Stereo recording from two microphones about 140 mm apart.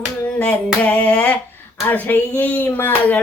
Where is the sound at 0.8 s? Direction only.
10° left (ahead or behind).